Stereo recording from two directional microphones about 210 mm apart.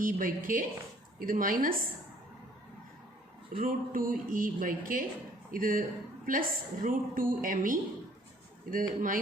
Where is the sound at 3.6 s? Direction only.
40° right (ahead or behind).